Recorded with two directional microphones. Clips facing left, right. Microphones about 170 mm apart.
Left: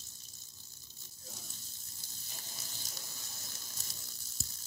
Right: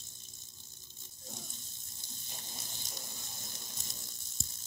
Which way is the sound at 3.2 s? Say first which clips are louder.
Right 3 dB; 50° right (ahead or behind).